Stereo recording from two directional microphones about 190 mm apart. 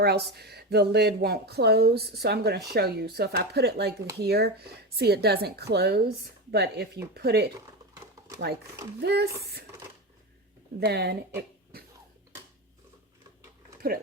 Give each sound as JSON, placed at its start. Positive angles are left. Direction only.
{"t": 0.0, "sound": "speech", "side_deg": -55}
{"t": 9.0, "sound": "speech", "side_deg": -60}
{"t": 10.8, "sound": "speech", "side_deg": -55}
{"t": 11.7, "sound": "cough", "side_deg": -55}